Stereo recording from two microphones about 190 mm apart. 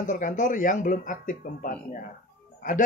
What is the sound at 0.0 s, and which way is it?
Speech, 40° left (ahead or behind).